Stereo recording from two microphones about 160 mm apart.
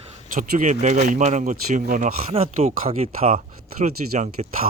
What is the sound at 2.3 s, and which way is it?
Speech, 40° right (ahead or behind).